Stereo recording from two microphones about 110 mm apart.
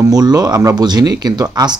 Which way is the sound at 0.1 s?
35° right (ahead or behind).